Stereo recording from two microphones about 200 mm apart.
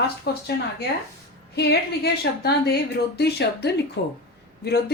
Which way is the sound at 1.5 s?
55° left (ahead or behind).